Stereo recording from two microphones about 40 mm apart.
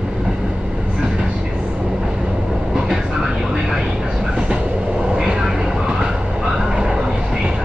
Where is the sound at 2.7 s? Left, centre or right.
Centre.